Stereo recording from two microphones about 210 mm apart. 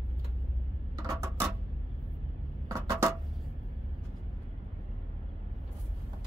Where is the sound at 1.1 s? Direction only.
15° right (ahead or behind).